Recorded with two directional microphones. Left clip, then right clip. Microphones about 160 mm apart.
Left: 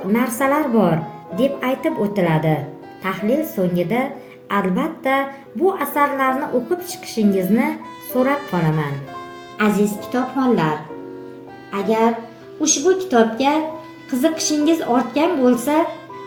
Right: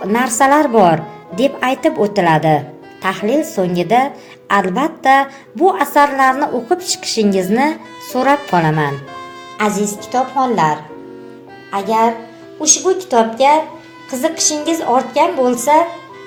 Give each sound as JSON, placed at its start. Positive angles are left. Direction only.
{"t": 0.1, "sound": "a woman's voice", "side_deg": -70}
{"t": 9.6, "sound": "a woman's voice", "side_deg": -40}
{"t": 11.7, "sound": "speech", "side_deg": -45}
{"t": 12.6, "sound": "a woman's voice", "side_deg": -35}